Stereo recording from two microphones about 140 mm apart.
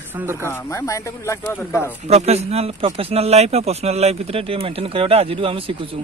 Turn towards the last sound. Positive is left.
turn(degrees=-40)  # may be behind; listen again after turning